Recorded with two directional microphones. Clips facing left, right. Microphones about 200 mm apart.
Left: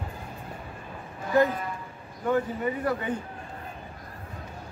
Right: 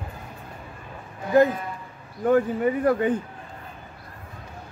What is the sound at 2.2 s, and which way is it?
Speech, 50° right (ahead or behind).